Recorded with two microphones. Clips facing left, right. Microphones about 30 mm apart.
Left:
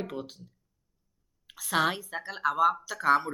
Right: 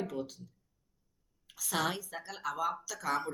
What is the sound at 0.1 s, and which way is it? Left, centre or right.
Speech, left.